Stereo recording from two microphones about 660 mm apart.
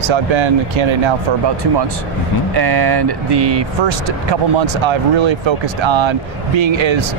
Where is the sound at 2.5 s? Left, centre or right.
Right.